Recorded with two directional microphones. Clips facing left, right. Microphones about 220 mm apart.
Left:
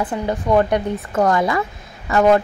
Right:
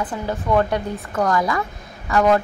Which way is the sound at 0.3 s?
15° left (ahead or behind).